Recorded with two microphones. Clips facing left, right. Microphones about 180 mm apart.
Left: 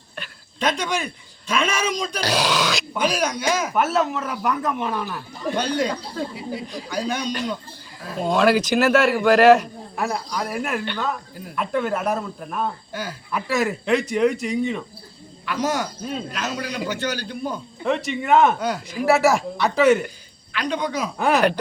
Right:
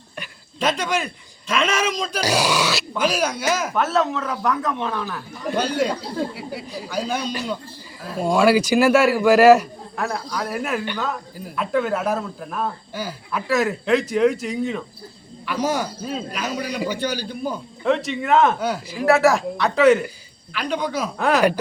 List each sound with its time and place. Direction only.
0.2 s speech: 5° right (ahead or behind)
5.5 s a man's voice: 5° right (ahead or behind)
6.3 s speech: 65° right (ahead or behind)
6.7 s a man's voice: 5° right (ahead or behind)
10.8 s a man's voice: 10° right (ahead or behind)
12.9 s speech: 10° right (ahead or behind)
13.3 s speech: centre (ahead or behind)
15.4 s a man's voice: 10° right (ahead or behind)
17.8 s speech: centre (ahead or behind)